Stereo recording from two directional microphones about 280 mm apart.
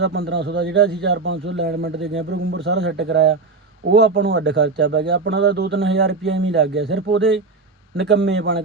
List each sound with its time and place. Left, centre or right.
0.0 s speech: right
7.2 s speech: centre
7.9 s a man's voice: right